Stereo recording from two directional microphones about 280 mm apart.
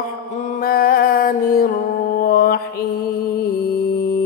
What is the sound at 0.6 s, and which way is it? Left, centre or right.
Music, left.